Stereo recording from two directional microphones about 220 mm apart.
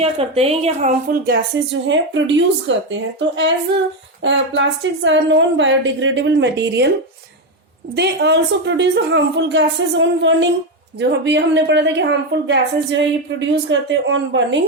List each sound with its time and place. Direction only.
0.0 s a woman's voice: 25° right (ahead or behind); by 6.8 s 50° right (ahead or behind)
7.9 s a woman's voice: 50° right (ahead or behind)